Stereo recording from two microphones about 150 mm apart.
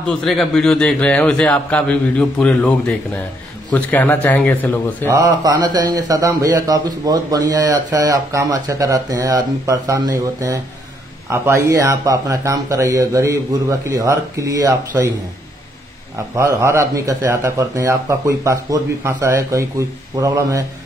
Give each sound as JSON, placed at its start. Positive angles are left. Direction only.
{"t": 0.0, "sound": "a man's voice", "side_deg": 5}
{"t": 5.0, "sound": "a man's voice", "side_deg": -20}
{"t": 16.3, "sound": "a man's voice", "side_deg": -20}